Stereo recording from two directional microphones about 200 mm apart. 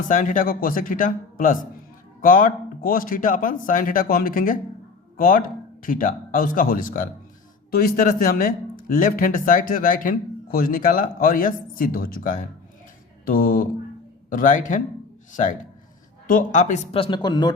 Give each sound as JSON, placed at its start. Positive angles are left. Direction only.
{"t": 0.1, "sound": "a man's voice", "side_deg": 40}